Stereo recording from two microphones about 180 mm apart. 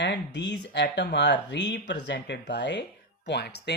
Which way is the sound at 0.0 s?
75° left (ahead or behind).